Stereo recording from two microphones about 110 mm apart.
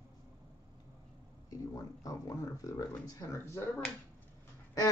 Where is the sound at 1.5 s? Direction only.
30° left (ahead or behind).